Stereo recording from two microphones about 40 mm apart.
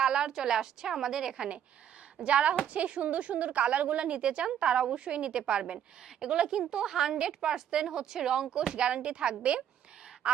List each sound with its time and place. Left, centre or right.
0.0 s a woman's voice: centre
2.2 s a woman's voice: right